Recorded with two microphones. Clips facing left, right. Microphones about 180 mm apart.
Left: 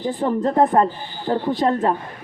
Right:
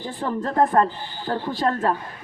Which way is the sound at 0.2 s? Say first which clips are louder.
Left 3 dB; 20° left (ahead or behind).